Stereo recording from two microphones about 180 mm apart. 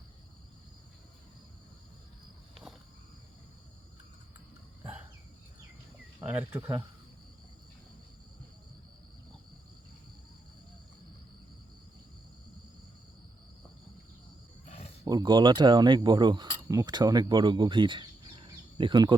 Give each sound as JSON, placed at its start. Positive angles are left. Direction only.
{"t": 6.1, "sound": "speech", "side_deg": -10}
{"t": 14.7, "sound": "a sound", "side_deg": 35}
{"t": 15.0, "sound": "speech", "side_deg": -20}